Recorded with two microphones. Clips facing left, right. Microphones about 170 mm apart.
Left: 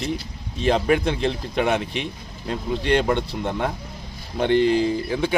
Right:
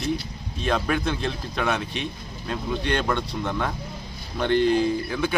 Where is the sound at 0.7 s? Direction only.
25° left (ahead or behind).